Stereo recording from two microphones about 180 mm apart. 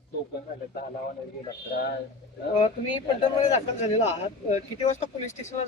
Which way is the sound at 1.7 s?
65° left (ahead or behind).